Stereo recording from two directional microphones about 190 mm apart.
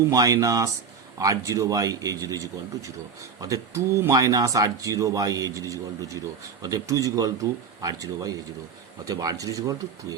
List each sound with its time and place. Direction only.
0.1 s speech: 20° right (ahead or behind)